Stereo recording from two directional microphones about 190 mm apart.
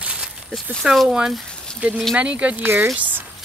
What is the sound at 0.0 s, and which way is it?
Speech, 5° right (ahead or behind).